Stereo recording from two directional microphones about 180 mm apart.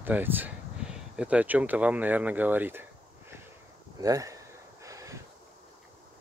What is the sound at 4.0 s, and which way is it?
Speech, 20° right (ahead or behind).